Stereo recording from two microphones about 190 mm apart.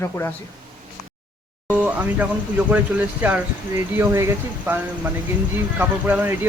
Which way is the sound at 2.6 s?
10° right (ahead or behind).